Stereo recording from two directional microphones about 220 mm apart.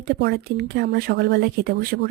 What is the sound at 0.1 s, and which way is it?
Speech, 50° right (ahead or behind).